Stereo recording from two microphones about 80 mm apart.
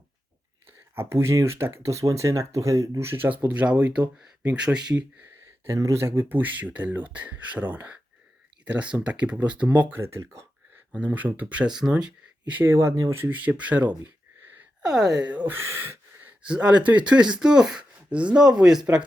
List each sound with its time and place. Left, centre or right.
0.9 s speech: right
3.1 s speech: right
5.2 s speech: right; by 10.0 s centre
10.0 s speech: right
10.9 s speech: centre
12.7 s speech: right
13.3 s speech: centre
14.8 s speech: centre
15.3 s speech: centre
15.5 s a sound: right
16.4 s speech: centre